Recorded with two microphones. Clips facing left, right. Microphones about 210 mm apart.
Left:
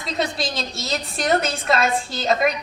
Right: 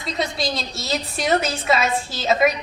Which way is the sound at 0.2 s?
Centre (ahead or behind).